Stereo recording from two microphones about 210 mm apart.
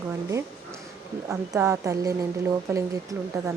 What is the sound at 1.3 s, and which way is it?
A woman's voice, 15° right (ahead or behind).